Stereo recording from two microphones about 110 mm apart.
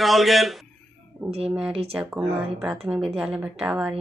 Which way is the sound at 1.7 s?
60° right (ahead or behind).